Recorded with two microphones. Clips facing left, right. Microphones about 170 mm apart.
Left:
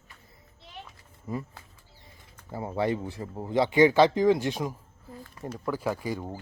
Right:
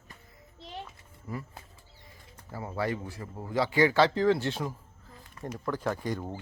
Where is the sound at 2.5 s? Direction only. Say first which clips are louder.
Left 4 dB; 25° left (ahead or behind).